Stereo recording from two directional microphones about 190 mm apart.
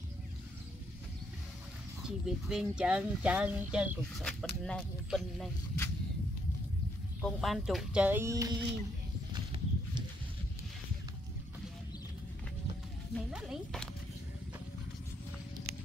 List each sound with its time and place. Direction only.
2.0 s speech: 5° right (ahead or behind)
4.2 s speech: 5° left (ahead or behind)
7.2 s speech: centre (ahead or behind); by 8.5 s 15° right (ahead or behind)
9.3 s horse: 20° right (ahead or behind)
13.1 s speech: centre (ahead or behind)